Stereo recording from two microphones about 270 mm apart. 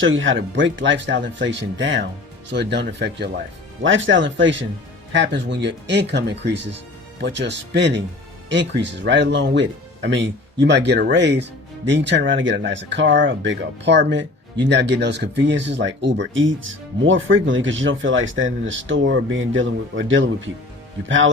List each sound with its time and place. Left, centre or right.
0.0 s speech: right